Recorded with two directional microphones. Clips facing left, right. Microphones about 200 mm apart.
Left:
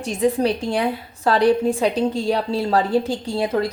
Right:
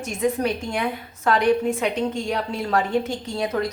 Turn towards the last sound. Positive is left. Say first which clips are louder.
# left 3 dB
turn(degrees=30)  # may be behind; listen again after turning